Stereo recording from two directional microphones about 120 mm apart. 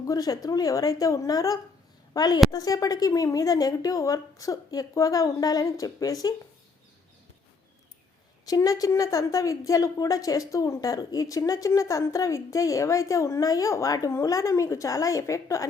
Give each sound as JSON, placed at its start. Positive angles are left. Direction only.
{"t": 0.0, "sound": "speech", "side_deg": 30}
{"t": 8.4, "sound": "a woman's voice", "side_deg": 30}